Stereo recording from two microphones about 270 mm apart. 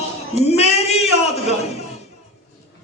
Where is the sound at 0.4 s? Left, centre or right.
Left.